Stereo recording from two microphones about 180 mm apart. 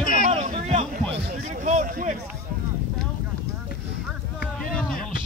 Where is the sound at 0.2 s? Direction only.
40° right (ahead or behind).